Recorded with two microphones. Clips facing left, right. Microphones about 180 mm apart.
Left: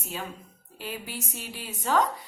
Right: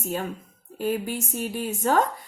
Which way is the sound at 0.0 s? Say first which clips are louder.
Right 7 dB; 50° right (ahead or behind).